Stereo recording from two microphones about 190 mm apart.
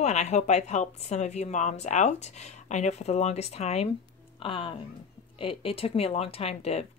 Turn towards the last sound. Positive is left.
turn(degrees=30)  # may be behind; listen again after turning